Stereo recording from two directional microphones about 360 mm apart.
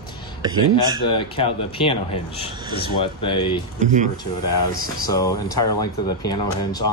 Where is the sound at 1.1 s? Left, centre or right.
Centre.